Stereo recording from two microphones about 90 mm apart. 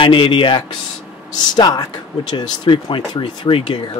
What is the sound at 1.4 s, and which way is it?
Speech, 50° left (ahead or behind).